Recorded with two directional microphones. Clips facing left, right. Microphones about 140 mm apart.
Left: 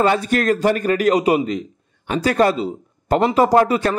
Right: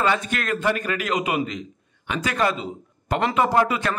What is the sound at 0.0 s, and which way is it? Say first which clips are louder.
A man's voice: left 7 dB; 40° left (ahead or behind).